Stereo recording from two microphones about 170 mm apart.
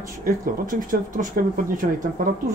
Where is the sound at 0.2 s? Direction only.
50° right (ahead or behind).